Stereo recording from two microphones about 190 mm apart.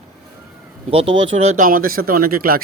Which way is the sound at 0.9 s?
30° right (ahead or behind).